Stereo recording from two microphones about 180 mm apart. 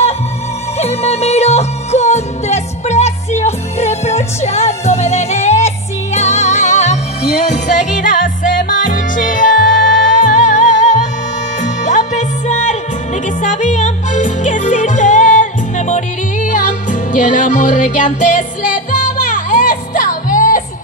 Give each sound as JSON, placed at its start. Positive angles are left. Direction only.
{"t": 0.7, "sound": "music", "side_deg": 35}
{"t": 16.4, "sound": "music", "side_deg": 45}